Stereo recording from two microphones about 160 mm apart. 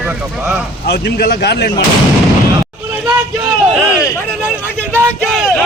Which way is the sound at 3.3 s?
5° right (ahead or behind).